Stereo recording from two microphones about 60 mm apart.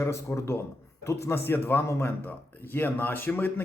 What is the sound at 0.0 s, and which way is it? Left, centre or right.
Speech, left.